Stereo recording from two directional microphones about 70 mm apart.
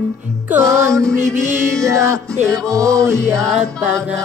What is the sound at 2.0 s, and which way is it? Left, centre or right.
Music, right.